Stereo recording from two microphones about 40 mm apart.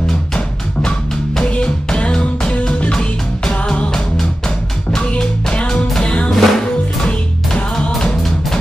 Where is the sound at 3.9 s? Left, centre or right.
Centre.